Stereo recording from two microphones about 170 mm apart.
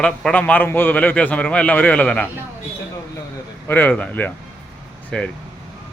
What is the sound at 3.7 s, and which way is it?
A man's voice, 10° left (ahead or behind).